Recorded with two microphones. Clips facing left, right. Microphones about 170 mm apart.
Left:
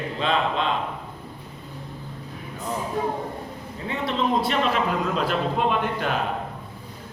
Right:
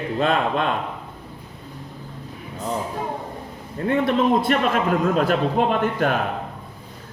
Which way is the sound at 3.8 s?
55° right (ahead or behind).